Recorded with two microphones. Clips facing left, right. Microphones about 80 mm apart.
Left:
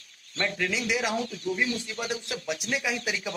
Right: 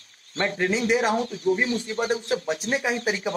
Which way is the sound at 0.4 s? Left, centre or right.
Right.